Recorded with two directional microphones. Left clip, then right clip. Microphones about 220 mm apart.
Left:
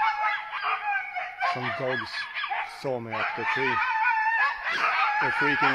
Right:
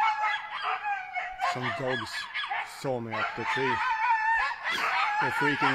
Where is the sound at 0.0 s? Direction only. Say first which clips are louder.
Left 1 dB; 50° right (ahead or behind).